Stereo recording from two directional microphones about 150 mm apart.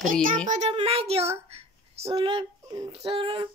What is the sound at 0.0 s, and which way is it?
Speech, 65° right (ahead or behind).